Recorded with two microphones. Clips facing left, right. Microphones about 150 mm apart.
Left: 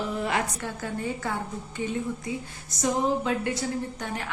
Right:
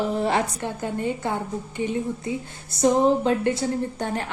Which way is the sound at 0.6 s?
20° right (ahead or behind).